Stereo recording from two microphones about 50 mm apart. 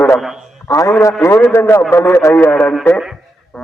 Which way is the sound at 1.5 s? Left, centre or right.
Left.